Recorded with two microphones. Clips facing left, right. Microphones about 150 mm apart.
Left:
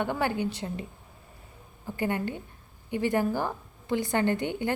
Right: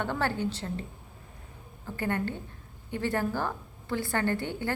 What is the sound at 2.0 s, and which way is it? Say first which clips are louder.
A woman's voice: left 1 dB; 15° left (ahead or behind).